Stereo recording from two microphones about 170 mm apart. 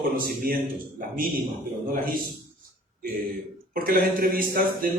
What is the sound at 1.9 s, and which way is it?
Speech, 55° right (ahead or behind).